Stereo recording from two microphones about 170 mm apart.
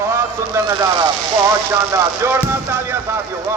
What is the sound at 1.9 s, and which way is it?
A man's voice, 15° right (ahead or behind).